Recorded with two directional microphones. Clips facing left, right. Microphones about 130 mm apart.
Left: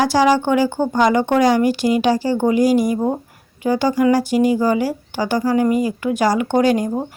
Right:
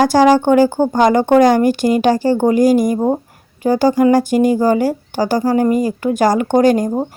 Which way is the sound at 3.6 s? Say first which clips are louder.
Right 4 dB; 45° right (ahead or behind).